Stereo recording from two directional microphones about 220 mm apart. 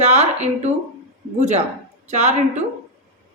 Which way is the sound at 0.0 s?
30° right (ahead or behind).